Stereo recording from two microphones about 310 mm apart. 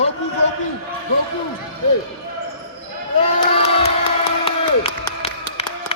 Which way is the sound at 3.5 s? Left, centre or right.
Centre.